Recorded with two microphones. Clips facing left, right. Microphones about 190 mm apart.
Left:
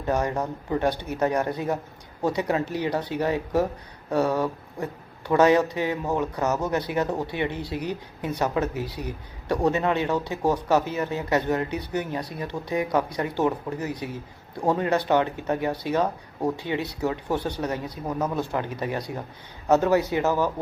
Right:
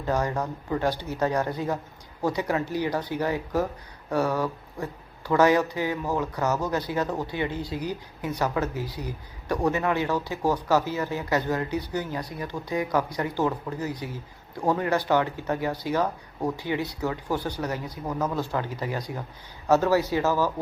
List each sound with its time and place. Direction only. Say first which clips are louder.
0.0 s speech: left 1 dB; 20° left (ahead or behind)